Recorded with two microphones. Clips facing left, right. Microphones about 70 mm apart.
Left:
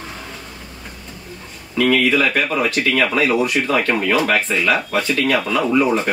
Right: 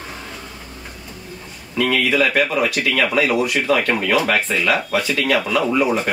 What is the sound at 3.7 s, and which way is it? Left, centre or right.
Speech, centre.